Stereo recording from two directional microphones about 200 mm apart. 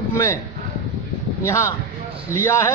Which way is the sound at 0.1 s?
15° left (ahead or behind).